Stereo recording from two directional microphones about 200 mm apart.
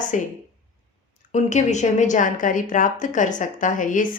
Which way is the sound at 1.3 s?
35° left (ahead or behind).